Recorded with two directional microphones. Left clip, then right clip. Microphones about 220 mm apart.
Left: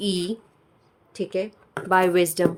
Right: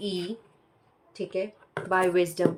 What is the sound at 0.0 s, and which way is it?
Speech, 50° left (ahead or behind).